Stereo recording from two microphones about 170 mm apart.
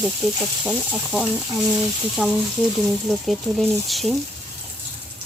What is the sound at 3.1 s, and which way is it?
Speech, centre (ahead or behind).